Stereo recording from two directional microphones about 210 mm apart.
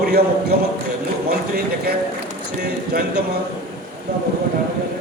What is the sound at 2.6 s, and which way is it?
Speech, 50° right (ahead or behind).